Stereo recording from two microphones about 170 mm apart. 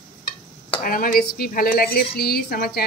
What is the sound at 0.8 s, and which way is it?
A woman's voice, 55° left (ahead or behind).